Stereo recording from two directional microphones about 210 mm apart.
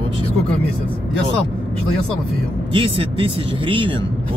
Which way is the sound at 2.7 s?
25° right (ahead or behind).